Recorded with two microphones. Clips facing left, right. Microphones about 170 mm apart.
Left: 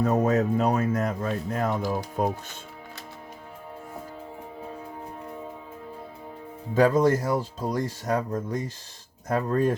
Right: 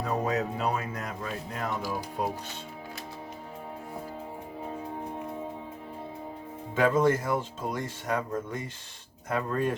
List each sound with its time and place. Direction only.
0.0 s speech: 45° left (ahead or behind)
6.7 s speech: 35° left (ahead or behind)